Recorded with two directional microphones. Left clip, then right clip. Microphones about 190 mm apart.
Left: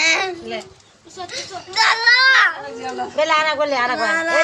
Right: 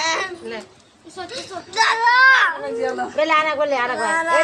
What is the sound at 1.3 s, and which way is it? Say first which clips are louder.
Speech: left 3 dB; 20° right (ahead or behind).